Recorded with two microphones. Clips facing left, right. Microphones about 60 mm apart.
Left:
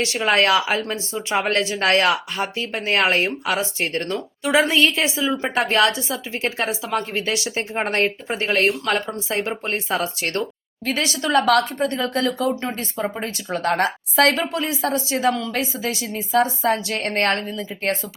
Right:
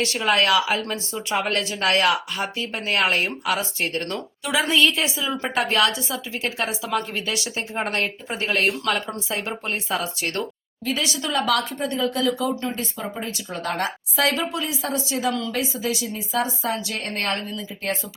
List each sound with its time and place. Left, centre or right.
0.0 s a woman's voice: left
11.3 s a woman's voice: left
14.5 s a woman's voice: left
16.3 s a woman's voice: left
16.7 s a woman's voice: left
17.0 s a woman's voice: left